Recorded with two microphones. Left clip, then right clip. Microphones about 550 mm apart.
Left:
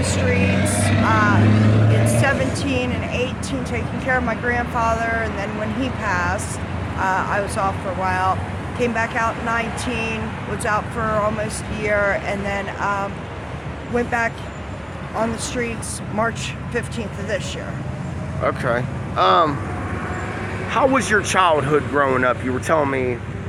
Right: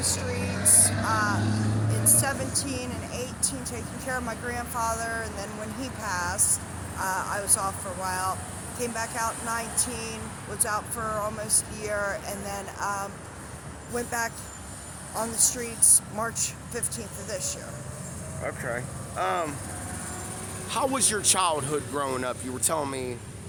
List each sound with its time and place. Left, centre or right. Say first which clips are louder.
0.7 s vehicle: left 3 dB; right
2.0 s speech: left 7 dB; right
18.4 s speech: left 12 dB; right
20.7 s speech: left 10 dB; right